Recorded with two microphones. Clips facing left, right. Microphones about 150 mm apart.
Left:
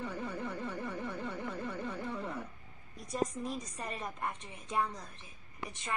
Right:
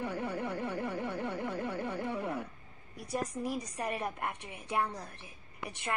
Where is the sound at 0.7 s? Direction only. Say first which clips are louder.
Right 4 dB; 65° right (ahead or behind).